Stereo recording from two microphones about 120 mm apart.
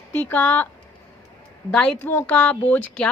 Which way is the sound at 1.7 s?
10° left (ahead or behind).